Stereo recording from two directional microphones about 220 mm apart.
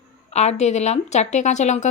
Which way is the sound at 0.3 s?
30° left (ahead or behind).